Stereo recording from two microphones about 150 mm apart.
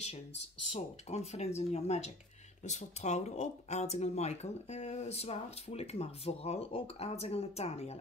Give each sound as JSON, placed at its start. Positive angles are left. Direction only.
{"t": 0.7, "sound": "speech", "side_deg": 45}